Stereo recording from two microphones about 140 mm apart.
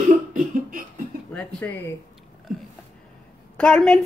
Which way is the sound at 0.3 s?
70° right (ahead or behind).